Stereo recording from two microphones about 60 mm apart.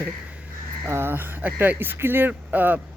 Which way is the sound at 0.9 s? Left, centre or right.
Right.